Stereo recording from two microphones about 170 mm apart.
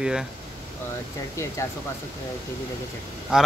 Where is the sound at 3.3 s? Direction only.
5° right (ahead or behind).